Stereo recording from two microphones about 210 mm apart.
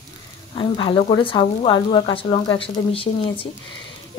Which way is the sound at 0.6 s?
25° left (ahead or behind).